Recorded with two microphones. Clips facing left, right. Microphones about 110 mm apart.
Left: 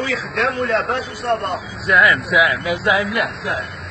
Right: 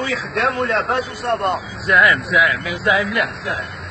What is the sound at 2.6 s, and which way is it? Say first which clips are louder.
Speech: left 1 dB; 20° left (ahead or behind).